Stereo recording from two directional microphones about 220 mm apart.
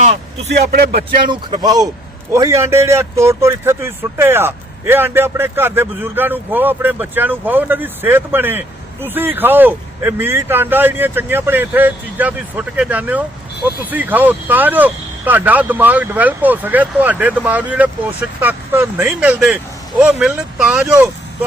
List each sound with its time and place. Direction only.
0.7 s speech: 45° right (ahead or behind)
1.3 s a man's voice: 20° right (ahead or behind); by 21.1 s 5° right (ahead or behind)